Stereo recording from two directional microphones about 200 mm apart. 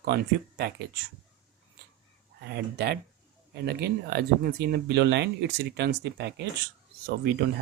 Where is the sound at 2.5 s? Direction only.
55° right (ahead or behind).